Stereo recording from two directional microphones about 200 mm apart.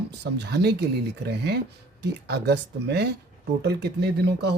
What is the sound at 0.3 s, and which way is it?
Speech, 55° right (ahead or behind).